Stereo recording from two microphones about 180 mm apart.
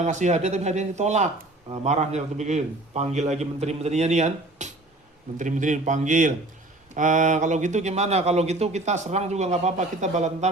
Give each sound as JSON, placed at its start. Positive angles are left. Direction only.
{"t": 0.0, "sound": "a man's voice", "side_deg": -40}